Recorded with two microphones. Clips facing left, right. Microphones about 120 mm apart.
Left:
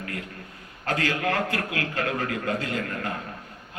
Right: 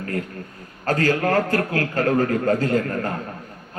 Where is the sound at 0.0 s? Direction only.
40° right (ahead or behind).